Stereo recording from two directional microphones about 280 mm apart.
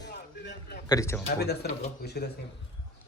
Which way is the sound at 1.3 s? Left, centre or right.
Left.